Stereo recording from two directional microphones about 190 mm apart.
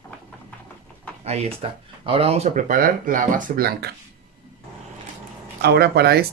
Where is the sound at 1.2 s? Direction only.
35° right (ahead or behind); by 3.9 s 55° right (ahead or behind).